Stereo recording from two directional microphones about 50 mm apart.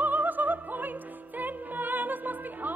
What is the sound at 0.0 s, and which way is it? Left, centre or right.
Opera, right.